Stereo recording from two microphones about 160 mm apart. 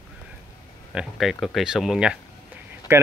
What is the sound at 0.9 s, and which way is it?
Speech, centre (ahead or behind).